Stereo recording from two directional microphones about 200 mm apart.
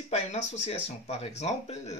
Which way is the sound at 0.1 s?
35° left (ahead or behind).